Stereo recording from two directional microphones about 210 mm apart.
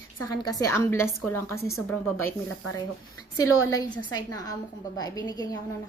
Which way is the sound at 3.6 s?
15° left (ahead or behind).